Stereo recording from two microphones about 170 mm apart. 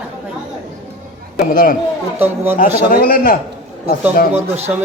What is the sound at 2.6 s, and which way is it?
Speech, 60° left (ahead or behind).